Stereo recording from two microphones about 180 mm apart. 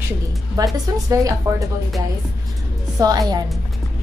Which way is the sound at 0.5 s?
20° right (ahead or behind).